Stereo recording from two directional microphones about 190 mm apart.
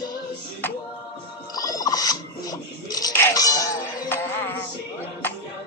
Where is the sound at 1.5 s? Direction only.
20° left (ahead or behind).